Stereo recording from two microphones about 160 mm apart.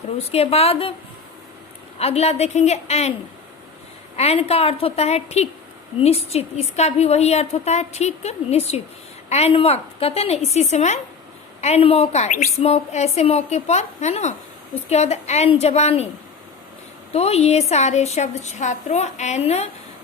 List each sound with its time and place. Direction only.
0.2 s a woman's voice: 40° left (ahead or behind)
2.0 s a woman's voice: 40° left (ahead or behind)
4.2 s a woman's voice: 40° left (ahead or behind)
17.1 s a woman's voice: 40° left (ahead or behind)